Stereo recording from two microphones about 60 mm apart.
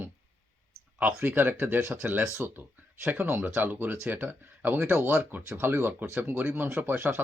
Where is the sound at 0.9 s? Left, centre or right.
Right.